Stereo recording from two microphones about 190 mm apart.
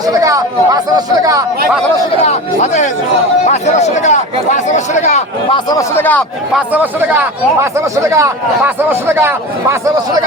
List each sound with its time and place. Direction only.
0.2 s speech: 20° right (ahead or behind)
2.2 s speech: 40° left (ahead or behind)
5.7 s a man's voice: 10° left (ahead or behind)
6.5 s speech: 10° right (ahead or behind)